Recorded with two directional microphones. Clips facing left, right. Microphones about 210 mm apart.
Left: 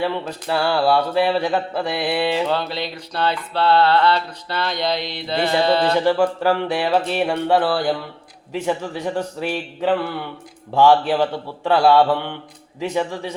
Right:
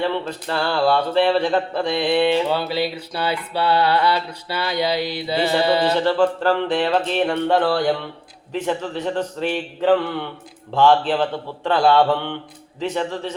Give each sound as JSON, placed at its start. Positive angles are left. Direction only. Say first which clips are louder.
{"t": 0.0, "sound": "speech", "louder": "even", "side_deg": 10}
{"t": 2.5, "sound": "a sound", "louder": "right 2 dB", "side_deg": -5}
{"t": 6.1, "sound": "speech", "louder": "even", "side_deg": 10}